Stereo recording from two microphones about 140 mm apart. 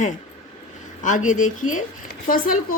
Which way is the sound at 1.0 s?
65° left (ahead or behind).